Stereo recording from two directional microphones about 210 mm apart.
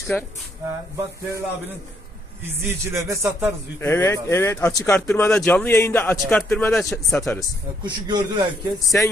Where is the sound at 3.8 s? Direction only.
10° left (ahead or behind).